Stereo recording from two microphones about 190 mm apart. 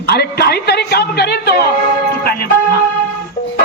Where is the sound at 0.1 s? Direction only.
55° left (ahead or behind).